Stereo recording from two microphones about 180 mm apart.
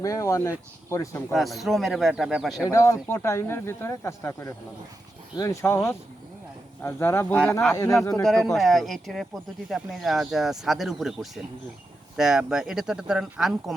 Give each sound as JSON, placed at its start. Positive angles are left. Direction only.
{"t": 0.0, "sound": "speech", "side_deg": 20}
{"t": 1.3, "sound": "speech", "side_deg": 0}
{"t": 2.6, "sound": "speech", "side_deg": 15}
{"t": 8.2, "sound": "speech", "side_deg": 0}